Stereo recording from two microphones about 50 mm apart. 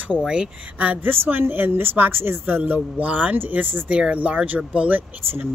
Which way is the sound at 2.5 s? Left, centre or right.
Right.